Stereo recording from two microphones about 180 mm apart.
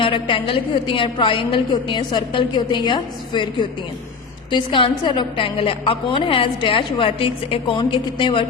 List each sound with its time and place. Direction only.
0.0 s a woman's voice: 30° left (ahead or behind)